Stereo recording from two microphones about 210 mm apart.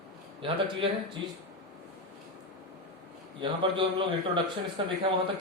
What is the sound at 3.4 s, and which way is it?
A man's voice, 25° right (ahead or behind).